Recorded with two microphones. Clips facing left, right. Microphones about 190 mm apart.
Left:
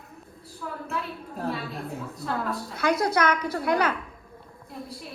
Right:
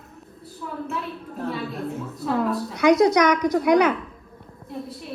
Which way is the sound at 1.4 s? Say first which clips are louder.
Right 3 dB; centre (ahead or behind).